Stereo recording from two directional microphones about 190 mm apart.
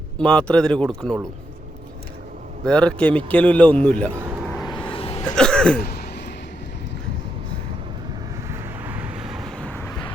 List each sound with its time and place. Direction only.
0.2 s speech: 5° left (ahead or behind)
2.6 s a man's voice: 5° left (ahead or behind)
4.2 s a sound: 5° right (ahead or behind)
4.5 s vehicle: 20° left (ahead or behind)
4.9 s hiccup: 30° left (ahead or behind)
5.4 s throat clearing: 5° left (ahead or behind)
5.8 s a sound: 55° left (ahead or behind)
8.4 s vehicle: 10° right (ahead or behind); by 9.9 s 10° left (ahead or behind)